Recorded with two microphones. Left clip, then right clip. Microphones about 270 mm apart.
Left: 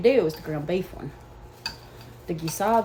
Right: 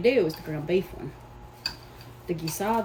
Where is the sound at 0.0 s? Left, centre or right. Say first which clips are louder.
Left 2 dB; centre.